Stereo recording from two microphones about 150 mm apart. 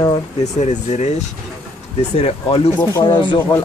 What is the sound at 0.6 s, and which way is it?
Speech, 50° left (ahead or behind).